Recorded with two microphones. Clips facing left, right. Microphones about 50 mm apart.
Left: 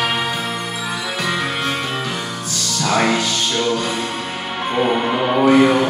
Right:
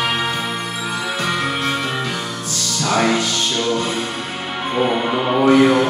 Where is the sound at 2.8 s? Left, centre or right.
Left.